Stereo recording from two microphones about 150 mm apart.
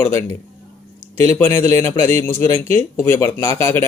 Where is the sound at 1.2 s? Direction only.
20° left (ahead or behind).